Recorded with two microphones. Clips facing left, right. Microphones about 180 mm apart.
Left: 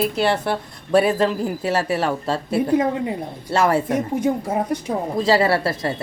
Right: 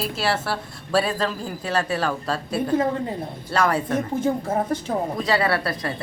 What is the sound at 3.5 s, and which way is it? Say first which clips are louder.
Speech: left 4 dB; 25° left (ahead or behind).